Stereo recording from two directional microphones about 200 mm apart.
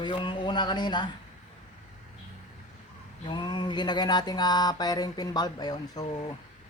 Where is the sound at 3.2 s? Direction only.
20° left (ahead or behind).